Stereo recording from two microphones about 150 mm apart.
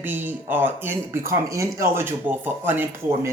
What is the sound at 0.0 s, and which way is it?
Speech, 15° right (ahead or behind).